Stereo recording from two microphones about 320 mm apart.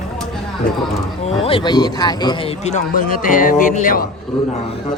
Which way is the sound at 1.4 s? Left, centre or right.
Centre.